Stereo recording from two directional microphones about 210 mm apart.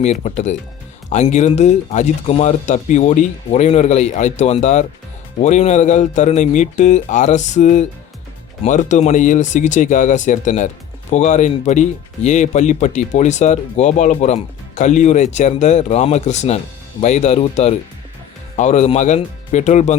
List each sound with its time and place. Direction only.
0.0 s speech: 35° left (ahead or behind)